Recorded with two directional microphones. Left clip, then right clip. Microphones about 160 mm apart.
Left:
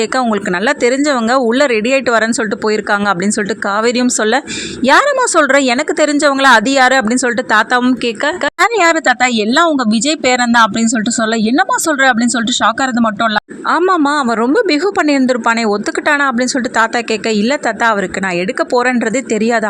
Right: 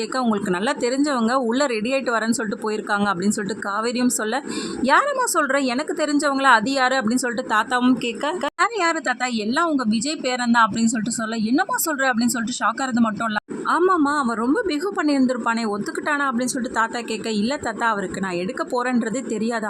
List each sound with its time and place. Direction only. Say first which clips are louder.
0.6 s a woman's voice: left 11 dB; 20° left (ahead or behind)